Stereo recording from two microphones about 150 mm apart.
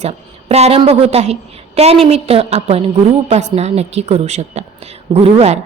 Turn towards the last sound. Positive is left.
turn(degrees=-45)  # may be behind; listen again after turning